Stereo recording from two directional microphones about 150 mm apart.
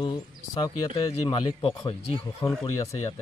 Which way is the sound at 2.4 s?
20° left (ahead or behind).